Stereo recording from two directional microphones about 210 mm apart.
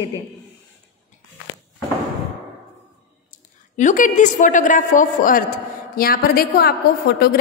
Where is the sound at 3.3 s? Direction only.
35° left (ahead or behind).